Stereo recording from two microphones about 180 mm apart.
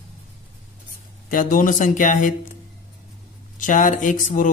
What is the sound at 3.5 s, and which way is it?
Speech, 45° left (ahead or behind).